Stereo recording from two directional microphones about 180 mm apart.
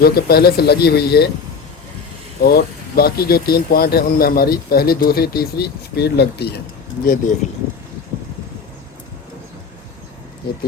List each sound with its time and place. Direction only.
0.0 s speech: 60° left (ahead or behind)
2.4 s speech: 60° left (ahead or behind)
7.0 s speech: 50° left (ahead or behind)